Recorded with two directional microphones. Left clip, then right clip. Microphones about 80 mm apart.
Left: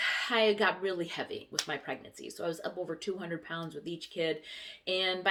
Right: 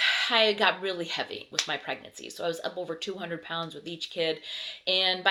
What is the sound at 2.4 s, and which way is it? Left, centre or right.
A woman's voice, left.